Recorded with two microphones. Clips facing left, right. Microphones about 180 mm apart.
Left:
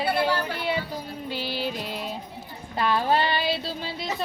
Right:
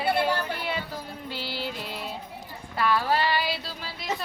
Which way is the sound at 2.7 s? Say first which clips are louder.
Left 2 dB; 25° left (ahead or behind).